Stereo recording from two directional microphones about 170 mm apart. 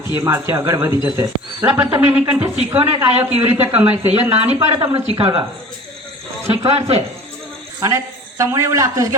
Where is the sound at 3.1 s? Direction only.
35° right (ahead or behind).